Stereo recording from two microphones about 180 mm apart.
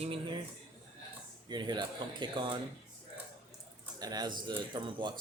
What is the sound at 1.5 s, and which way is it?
Speech, 25° right (ahead or behind).